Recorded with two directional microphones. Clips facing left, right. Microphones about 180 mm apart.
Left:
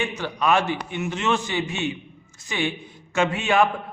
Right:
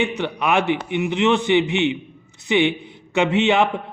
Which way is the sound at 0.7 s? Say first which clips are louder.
Right 6 dB; 20° right (ahead or behind).